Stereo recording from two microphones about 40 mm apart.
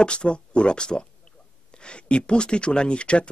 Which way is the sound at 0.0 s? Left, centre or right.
Left.